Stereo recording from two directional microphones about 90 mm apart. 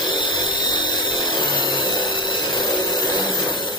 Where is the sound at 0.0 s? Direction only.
65° left (ahead or behind).